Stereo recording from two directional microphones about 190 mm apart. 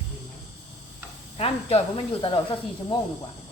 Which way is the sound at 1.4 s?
30° left (ahead or behind).